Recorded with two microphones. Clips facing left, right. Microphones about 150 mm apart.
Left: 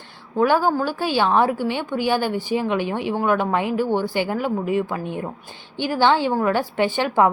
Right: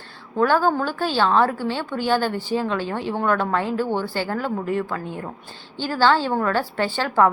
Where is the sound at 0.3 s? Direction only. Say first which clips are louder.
Left 1 dB; 15° left (ahead or behind).